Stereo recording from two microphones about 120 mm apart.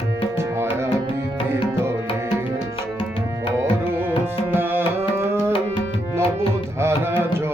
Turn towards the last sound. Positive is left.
turn(degrees=-20)  # may be behind; listen again after turning